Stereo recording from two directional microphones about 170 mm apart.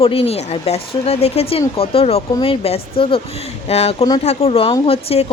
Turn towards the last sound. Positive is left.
turn(degrees=35)  # may be behind; listen again after turning